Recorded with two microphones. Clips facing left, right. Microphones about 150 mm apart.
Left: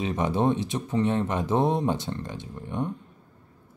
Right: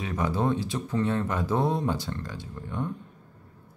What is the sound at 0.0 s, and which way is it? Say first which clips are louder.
Speech: left 3 dB; 20° left (ahead or behind).